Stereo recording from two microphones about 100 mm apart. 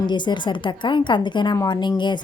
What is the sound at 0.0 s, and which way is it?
A woman's voice, 50° left (ahead or behind).